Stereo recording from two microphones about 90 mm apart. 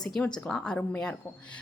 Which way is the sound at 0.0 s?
10° left (ahead or behind).